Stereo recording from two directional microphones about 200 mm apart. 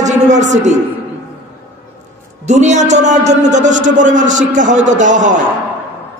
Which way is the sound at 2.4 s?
35° right (ahead or behind).